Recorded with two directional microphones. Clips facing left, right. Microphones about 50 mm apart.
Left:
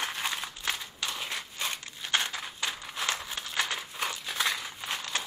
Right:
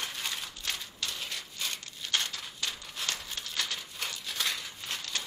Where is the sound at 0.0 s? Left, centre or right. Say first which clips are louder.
Left 4 dB; left.